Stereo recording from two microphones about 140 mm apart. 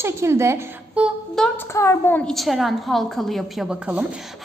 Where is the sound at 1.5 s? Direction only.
20° left (ahead or behind).